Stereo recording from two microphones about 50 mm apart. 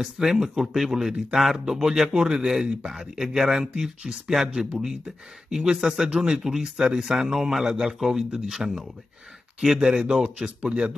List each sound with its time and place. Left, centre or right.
0.0 s speech: centre
2.0 s speech: centre
9.8 s speech: centre